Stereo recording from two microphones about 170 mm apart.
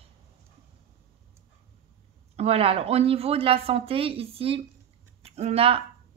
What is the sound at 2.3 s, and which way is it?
Speech, 35° right (ahead or behind).